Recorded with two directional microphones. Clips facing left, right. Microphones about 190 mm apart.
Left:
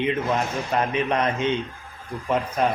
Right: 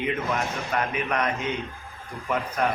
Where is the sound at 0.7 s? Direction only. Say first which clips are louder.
Left 4 dB; 25° left (ahead or behind).